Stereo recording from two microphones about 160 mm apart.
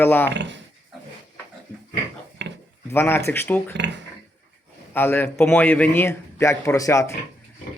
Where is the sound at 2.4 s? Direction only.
90° right.